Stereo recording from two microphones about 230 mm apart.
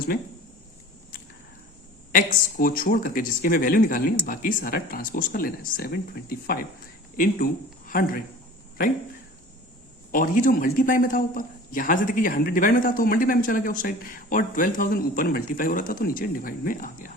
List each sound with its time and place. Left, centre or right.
2.1 s a man's voice: left
7.9 s speech: left
10.1 s a man's voice: left